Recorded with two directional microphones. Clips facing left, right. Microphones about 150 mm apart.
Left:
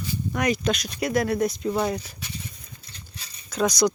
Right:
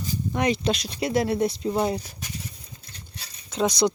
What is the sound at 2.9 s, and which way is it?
Horse, 40° right (ahead or behind).